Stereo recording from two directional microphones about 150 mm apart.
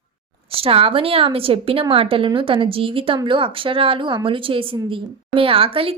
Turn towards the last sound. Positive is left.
turn(degrees=-40)  # may be behind; listen again after turning